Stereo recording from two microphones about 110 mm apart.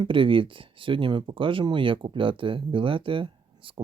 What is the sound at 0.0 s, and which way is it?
Speech, 50° right (ahead or behind).